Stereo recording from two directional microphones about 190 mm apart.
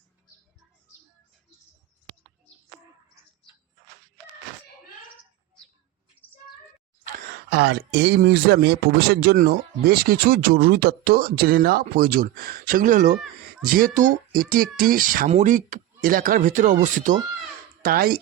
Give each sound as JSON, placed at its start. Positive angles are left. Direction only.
{"t": 7.5, "sound": "speech", "side_deg": -60}
{"t": 8.2, "sound": "speech", "side_deg": -50}